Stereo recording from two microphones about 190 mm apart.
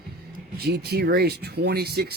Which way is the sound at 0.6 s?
55° right (ahead or behind).